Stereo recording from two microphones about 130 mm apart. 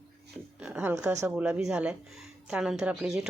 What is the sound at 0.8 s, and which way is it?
Speech, 20° right (ahead or behind).